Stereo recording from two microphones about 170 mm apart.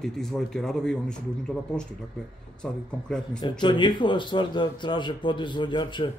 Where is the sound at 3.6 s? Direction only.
25° left (ahead or behind).